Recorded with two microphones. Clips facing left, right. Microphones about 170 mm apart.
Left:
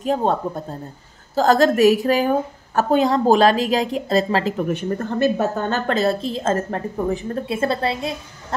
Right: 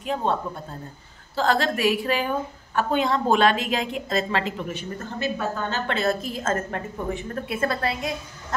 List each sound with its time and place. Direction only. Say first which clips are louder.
0.0 s a woman's voice: left 5 dB; 40° left (ahead or behind)